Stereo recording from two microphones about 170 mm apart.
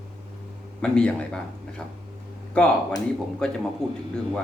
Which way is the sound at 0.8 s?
5° left (ahead or behind).